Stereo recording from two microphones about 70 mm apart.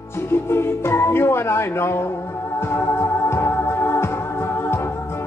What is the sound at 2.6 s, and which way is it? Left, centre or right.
Music, left.